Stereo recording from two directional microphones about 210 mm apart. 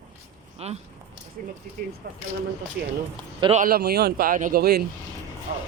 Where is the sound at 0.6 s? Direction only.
30° right (ahead or behind).